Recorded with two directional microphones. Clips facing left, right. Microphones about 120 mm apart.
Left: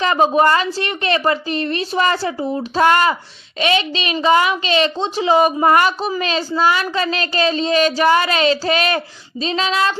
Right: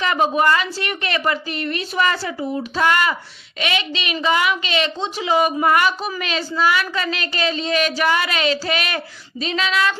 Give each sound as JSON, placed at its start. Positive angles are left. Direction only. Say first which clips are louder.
{"t": 0.0, "sound": "a woman's voice", "louder": "left 4 dB", "side_deg": 35}